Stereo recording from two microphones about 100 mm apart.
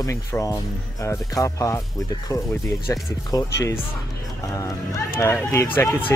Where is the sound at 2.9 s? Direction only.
35° left (ahead or behind).